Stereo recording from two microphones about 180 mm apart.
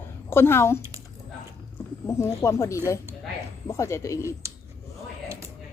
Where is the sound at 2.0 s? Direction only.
15° left (ahead or behind).